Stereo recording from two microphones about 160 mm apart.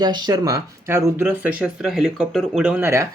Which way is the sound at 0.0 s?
25° right (ahead or behind).